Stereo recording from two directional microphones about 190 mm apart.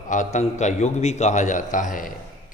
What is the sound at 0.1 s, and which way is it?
A man's voice, 40° left (ahead or behind).